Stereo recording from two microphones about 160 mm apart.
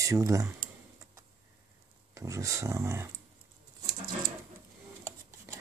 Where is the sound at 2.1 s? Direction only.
20° right (ahead or behind).